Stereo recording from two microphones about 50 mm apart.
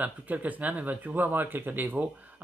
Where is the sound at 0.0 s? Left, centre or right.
Right.